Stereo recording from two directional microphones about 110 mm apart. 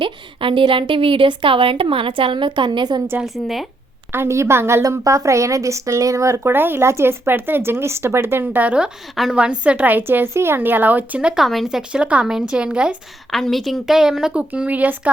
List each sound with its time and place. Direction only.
0.0 s a woman's voice: 50° right (ahead or behind)
3.2 s a woman's voice: centre (ahead or behind)
4.1 s a woman's voice: 25° right (ahead or behind)
13.3 s a woman's voice: centre (ahead or behind); by 15.1 s 15° right (ahead or behind)